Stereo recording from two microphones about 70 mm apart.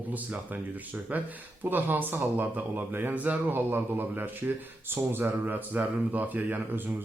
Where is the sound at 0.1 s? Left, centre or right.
Right.